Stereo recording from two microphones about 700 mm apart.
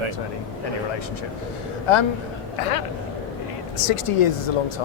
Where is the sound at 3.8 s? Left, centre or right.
Left.